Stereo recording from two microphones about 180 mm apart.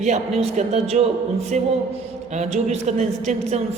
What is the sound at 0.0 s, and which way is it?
A woman's voice, 40° right (ahead or behind).